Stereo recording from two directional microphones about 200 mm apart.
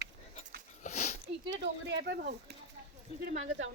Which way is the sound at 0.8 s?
35° left (ahead or behind).